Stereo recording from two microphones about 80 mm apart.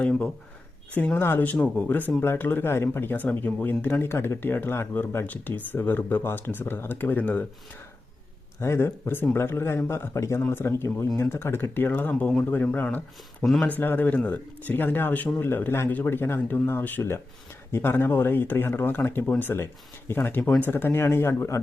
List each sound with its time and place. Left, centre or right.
0.0 s speech: centre
8.6 s speech: left
10.2 s speech: left